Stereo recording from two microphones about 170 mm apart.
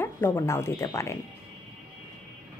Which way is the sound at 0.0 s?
15° left (ahead or behind).